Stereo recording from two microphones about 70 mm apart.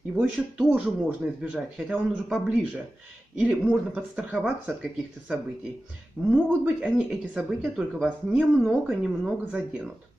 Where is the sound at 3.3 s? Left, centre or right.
Centre.